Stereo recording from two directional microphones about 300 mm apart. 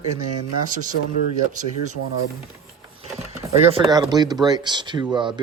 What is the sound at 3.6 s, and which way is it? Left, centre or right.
Speech, centre.